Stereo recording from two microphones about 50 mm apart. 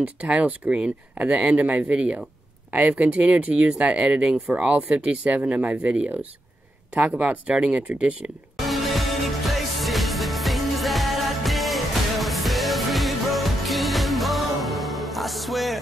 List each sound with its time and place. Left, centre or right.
0.0 s speech: right
8.5 s music: centre